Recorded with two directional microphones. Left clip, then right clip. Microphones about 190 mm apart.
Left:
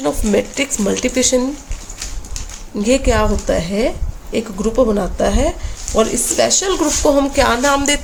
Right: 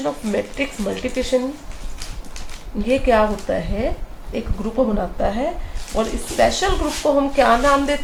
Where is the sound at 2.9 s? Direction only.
70° left (ahead or behind).